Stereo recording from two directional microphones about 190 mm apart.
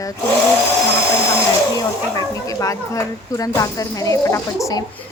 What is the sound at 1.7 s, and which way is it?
Speech, 20° left (ahead or behind).